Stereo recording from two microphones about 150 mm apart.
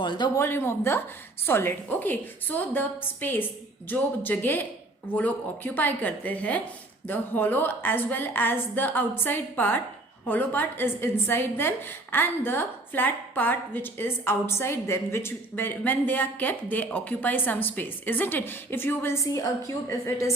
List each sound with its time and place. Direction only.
0.0 s speech: 30° left (ahead or behind)
0.3 s a woman's voice: 15° left (ahead or behind)